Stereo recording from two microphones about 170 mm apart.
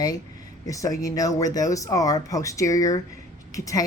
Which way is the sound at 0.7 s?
20° left (ahead or behind).